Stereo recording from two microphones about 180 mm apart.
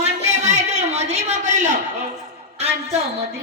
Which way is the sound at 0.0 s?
40° right (ahead or behind).